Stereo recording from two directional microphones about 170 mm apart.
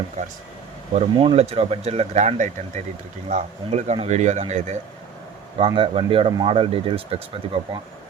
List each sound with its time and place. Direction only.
0.2 s speech: 45° right (ahead or behind)
5.5 s speech: 30° right (ahead or behind)